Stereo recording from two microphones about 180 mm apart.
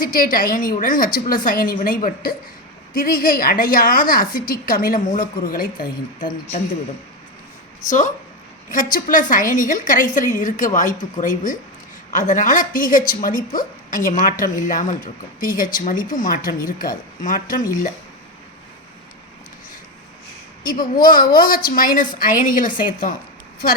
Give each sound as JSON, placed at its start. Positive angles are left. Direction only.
{"t": 0.0, "sound": "a woman's voice", "side_deg": 50}
{"t": 7.9, "sound": "a woman's voice", "side_deg": 45}
{"t": 20.7, "sound": "a woman's voice", "side_deg": 50}